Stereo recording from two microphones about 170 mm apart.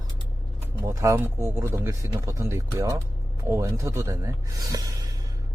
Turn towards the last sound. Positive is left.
turn(degrees=-20)  # may be behind; listen again after turning